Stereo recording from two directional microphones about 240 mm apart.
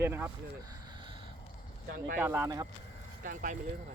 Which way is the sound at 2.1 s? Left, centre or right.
Centre.